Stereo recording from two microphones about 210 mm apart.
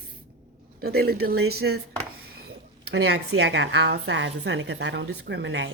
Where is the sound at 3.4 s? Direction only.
55° right (ahead or behind).